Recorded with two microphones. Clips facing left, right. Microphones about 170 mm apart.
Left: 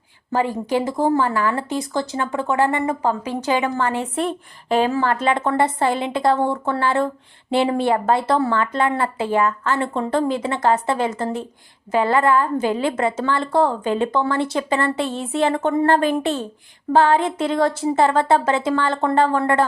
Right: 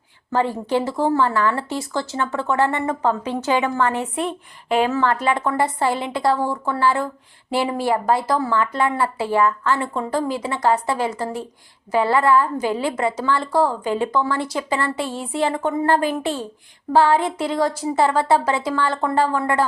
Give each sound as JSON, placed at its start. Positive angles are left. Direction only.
{"t": 0.3, "sound": "speech", "side_deg": 15}
{"t": 3.8, "sound": "a woman's voice", "side_deg": 30}
{"t": 5.2, "sound": "a woman's voice", "side_deg": 25}
{"t": 19.2, "sound": "speech", "side_deg": 55}